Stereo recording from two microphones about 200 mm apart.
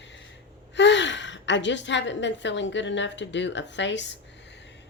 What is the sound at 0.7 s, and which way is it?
A woman's voice, 60° left (ahead or behind).